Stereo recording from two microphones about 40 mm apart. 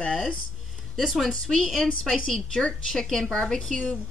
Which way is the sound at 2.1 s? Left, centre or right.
Centre.